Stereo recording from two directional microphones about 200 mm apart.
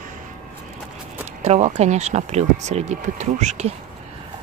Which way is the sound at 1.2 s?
35° right (ahead or behind).